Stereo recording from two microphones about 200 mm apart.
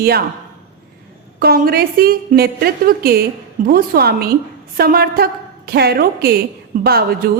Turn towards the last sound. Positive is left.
turn(degrees=-50)  # may be behind; listen again after turning